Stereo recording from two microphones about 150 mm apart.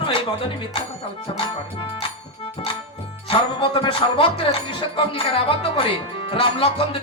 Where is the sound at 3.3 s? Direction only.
35° left (ahead or behind).